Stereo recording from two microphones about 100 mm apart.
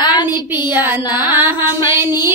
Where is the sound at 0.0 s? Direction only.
45° left (ahead or behind).